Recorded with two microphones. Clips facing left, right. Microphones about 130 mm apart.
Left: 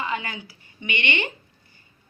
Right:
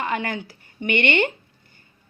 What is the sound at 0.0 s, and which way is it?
Speech, 55° right (ahead or behind).